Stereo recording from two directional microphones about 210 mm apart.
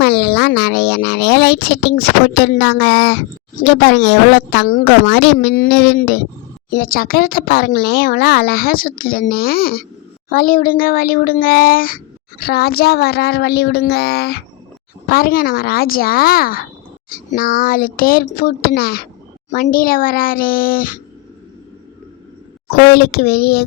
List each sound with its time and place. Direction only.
0.0 s speech: 50° left (ahead or behind)
22.9 s speech: 50° left (ahead or behind)